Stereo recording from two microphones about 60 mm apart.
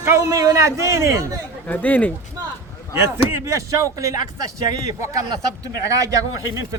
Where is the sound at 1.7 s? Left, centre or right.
Left.